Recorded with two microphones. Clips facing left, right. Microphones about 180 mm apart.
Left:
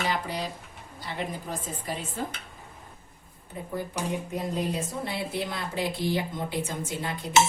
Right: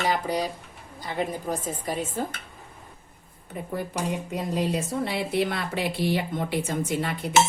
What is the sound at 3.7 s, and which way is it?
A woman's voice, 75° right (ahead or behind).